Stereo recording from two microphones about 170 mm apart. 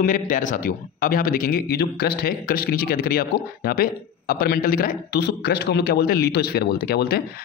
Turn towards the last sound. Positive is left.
turn(degrees=65)  # may be behind; listen again after turning